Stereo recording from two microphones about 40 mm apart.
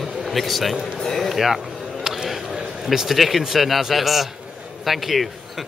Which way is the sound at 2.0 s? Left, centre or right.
Centre.